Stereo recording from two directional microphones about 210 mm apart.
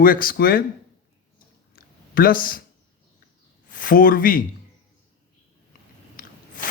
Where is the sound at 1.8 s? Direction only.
45° left (ahead or behind).